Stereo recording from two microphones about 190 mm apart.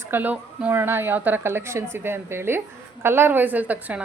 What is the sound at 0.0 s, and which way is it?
Speech, 10° right (ahead or behind).